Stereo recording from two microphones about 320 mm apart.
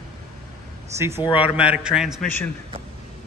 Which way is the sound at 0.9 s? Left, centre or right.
Centre.